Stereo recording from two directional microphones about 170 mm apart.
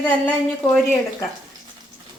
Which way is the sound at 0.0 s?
10° left (ahead or behind).